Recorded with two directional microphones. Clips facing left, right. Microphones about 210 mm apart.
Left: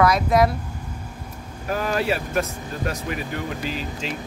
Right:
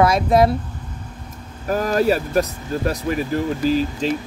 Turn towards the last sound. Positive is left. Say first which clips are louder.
# right 10 dB
turn(degrees=-35)  # may be behind; listen again after turning